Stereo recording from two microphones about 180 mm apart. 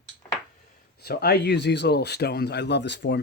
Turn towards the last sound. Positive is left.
turn(degrees=75)  # may be behind; listen again after turning